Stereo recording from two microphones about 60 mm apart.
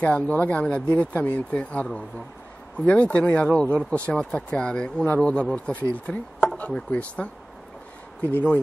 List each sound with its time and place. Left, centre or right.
0.0 s speech: left
8.2 s speech: left